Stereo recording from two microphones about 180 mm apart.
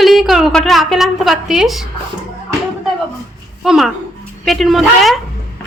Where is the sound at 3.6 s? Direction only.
Centre (ahead or behind).